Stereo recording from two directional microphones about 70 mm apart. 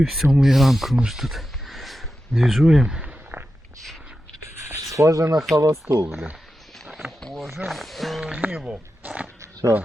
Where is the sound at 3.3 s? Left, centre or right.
Right.